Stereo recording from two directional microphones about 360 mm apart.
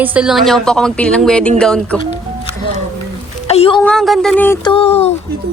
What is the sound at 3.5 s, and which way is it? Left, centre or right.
Speech, centre.